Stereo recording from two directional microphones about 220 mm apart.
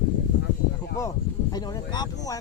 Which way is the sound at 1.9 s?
20° left (ahead or behind).